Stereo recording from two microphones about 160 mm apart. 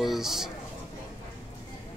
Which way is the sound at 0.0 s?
Centre (ahead or behind).